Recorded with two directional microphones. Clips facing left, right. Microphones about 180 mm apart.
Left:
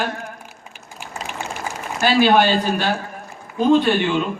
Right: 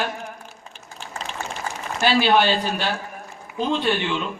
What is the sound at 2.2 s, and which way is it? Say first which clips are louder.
Speech: left 4 dB; 45° left (ahead or behind).